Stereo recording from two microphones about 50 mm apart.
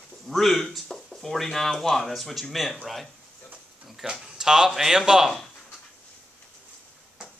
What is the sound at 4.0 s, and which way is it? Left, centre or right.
Speech, centre.